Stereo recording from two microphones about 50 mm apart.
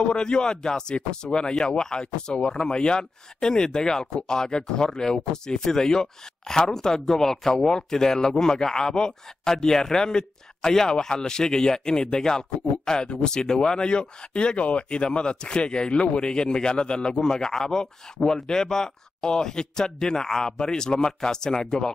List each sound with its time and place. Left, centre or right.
0.0 s speech: centre